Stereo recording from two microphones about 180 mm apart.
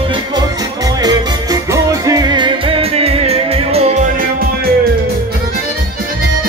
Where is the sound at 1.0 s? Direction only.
20° right (ahead or behind); by 4.0 s 35° right (ahead or behind).